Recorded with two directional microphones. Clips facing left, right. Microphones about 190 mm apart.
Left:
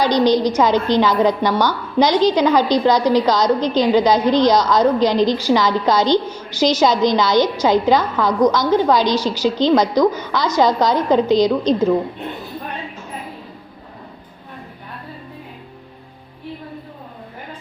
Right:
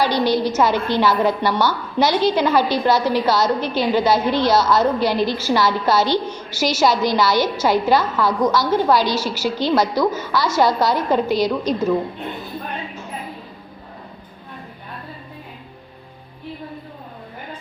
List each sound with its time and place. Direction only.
0.0 s a woman's voice: 15° left (ahead or behind)